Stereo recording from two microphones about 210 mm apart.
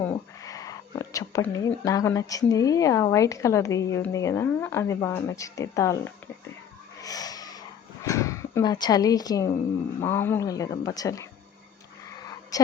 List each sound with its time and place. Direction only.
0.0 s speech: 15° left (ahead or behind)
7.0 s vehicle: 15° left (ahead or behind)
8.0 s speech: 15° left (ahead or behind)
12.5 s a sound: 15° left (ahead or behind)